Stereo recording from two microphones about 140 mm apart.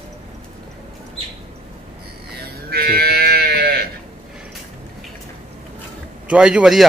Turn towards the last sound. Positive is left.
turn(degrees=-5)  # may be behind; listen again after turning